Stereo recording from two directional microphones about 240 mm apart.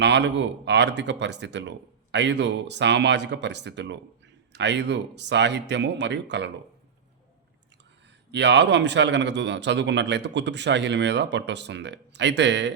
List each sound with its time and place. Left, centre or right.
0.0 s a man's voice: right
8.3 s a man's voice: right